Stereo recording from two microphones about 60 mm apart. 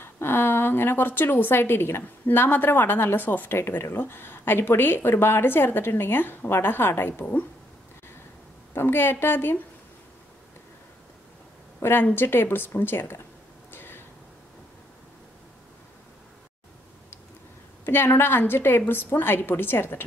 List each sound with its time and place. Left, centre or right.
0.0 s a woman's voice: left
8.7 s a woman's voice: left
11.8 s a woman's voice: left
13.7 s a sound: left
17.8 s a woman's voice: left